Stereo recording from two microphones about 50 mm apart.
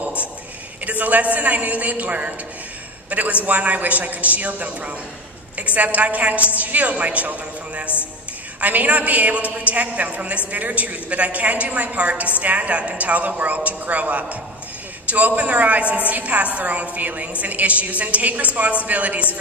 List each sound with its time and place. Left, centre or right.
0.9 s a man's voice: right
8.6 s a woman's voice: right